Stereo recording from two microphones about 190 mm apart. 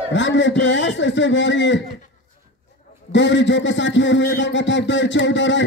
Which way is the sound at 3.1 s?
70° left (ahead or behind).